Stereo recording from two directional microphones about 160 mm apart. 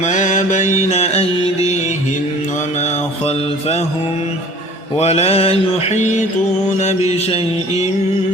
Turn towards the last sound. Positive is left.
turn(degrees=40)  # may be behind; listen again after turning